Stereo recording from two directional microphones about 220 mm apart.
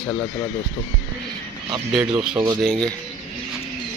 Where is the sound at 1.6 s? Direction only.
15° right (ahead or behind).